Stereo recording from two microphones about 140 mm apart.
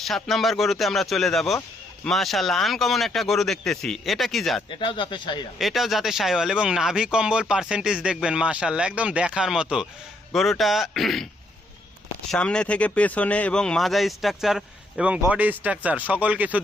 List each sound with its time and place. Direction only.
0.0 s speech: centre (ahead or behind)
4.8 s speech: 35° left (ahead or behind)
5.5 s speech: centre (ahead or behind)
12.3 s speech: 5° left (ahead or behind); by 16.6 s 10° right (ahead or behind)